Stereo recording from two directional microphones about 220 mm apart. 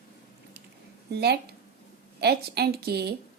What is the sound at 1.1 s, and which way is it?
A woman's voice, 50° right (ahead or behind).